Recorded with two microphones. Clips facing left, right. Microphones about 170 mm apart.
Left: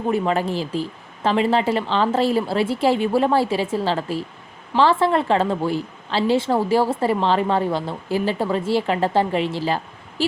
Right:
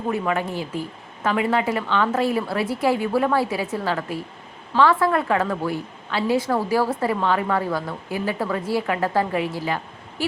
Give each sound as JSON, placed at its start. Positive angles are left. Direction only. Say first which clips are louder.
{"t": 0.1, "sound": "a woman's voice", "louder": "left 3 dB", "side_deg": 30}